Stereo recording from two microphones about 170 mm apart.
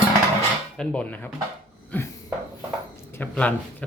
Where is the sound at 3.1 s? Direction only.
10° left (ahead or behind).